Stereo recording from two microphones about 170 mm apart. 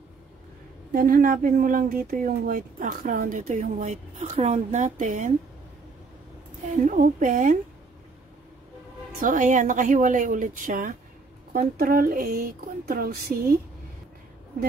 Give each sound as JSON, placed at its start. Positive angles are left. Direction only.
{"t": 0.9, "sound": "speech", "side_deg": -55}
{"t": 6.8, "sound": "speech", "side_deg": -45}
{"t": 9.2, "sound": "speech", "side_deg": -50}